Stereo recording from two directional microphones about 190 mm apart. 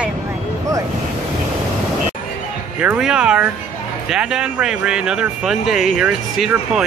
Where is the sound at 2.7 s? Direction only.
5° right (ahead or behind).